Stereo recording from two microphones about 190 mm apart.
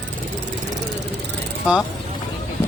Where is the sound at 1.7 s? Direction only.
5° right (ahead or behind).